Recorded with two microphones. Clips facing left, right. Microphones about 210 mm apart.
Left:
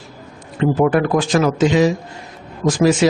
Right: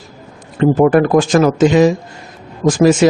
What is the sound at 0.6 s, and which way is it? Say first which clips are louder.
Speech: right 5 dB; 45° right (ahead or behind).